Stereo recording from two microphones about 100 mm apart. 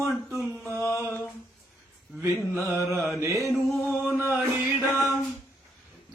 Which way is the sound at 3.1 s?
30° right (ahead or behind).